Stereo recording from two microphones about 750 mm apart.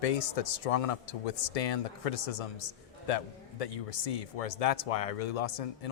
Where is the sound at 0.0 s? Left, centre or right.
Left.